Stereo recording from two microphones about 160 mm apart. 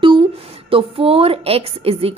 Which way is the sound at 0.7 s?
35° right (ahead or behind).